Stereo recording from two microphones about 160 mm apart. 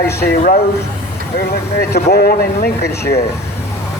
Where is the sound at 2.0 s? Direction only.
80° left.